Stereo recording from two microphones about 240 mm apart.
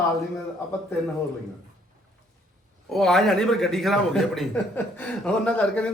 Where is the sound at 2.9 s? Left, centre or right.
Centre.